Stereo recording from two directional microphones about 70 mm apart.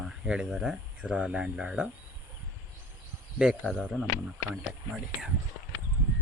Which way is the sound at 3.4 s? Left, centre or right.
Centre.